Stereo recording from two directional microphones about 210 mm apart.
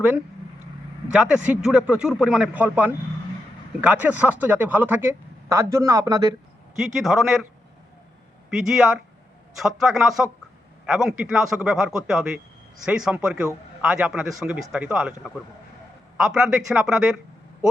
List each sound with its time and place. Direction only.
1.1 s speech: 5° right (ahead or behind)
6.7 s speech: centre (ahead or behind)
8.4 s a man's voice: centre (ahead or behind)